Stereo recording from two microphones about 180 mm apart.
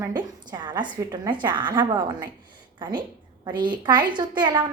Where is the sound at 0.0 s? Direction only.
25° right (ahead or behind).